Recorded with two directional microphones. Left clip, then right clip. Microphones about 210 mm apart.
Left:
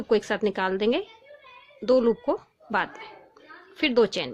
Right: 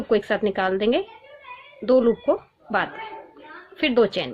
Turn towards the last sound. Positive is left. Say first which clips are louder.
# right 2 dB
turn(degrees=50)  # may be behind; listen again after turning